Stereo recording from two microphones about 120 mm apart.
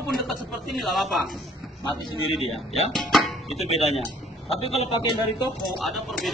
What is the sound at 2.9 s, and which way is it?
Speech, centre (ahead or behind).